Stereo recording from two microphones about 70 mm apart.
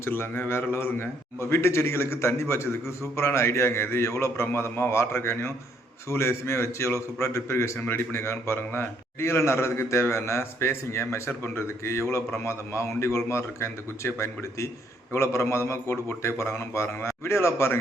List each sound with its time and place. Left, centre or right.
0.0 s a man's voice: left